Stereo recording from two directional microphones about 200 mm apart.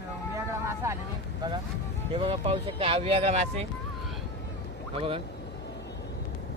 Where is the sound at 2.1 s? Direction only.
30° right (ahead or behind).